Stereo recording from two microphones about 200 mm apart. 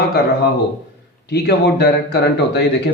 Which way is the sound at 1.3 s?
55° left (ahead or behind).